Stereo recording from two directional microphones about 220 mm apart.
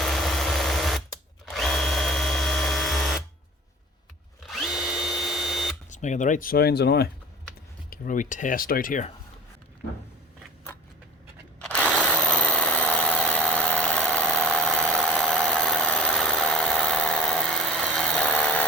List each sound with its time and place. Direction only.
0.0 s a sound: centre (ahead or behind)
1.5 s drill: centre (ahead or behind)
4.4 s drill: centre (ahead or behind)
5.9 s speech: 35° left (ahead or behind)
7.9 s speech: 35° left (ahead or behind)
11.6 s a sound: 5° left (ahead or behind)